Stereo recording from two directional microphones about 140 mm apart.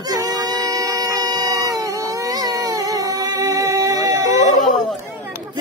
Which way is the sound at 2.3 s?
25° right (ahead or behind).